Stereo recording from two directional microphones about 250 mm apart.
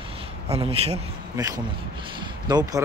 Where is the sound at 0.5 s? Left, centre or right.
Right.